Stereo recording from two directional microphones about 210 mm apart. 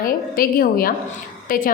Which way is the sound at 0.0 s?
40° left (ahead or behind).